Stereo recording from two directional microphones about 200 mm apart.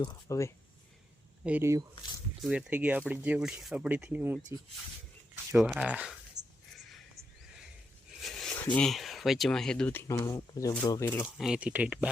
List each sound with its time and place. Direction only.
0.0 s speech: 20° left (ahead or behind)
1.5 s speech: 10° right (ahead or behind)
5.5 s speech: 5° right (ahead or behind)
8.2 s speech: centre (ahead or behind)
11.3 s speech: 5° right (ahead or behind)